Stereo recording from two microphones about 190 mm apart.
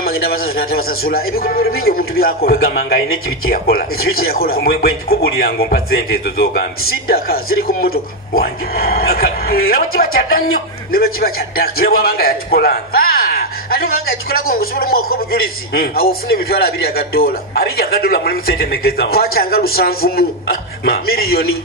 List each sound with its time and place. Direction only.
0.6 s a man's voice: 50° left (ahead or behind)